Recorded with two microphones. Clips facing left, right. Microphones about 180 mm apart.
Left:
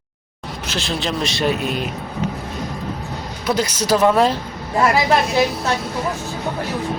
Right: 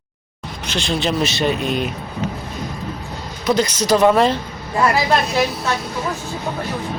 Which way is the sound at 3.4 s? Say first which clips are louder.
Right 3 dB; 10° left (ahead or behind).